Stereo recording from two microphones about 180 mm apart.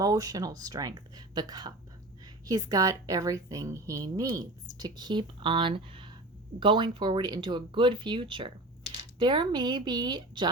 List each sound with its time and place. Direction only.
0.0 s a woman's voice: 20° right (ahead or behind)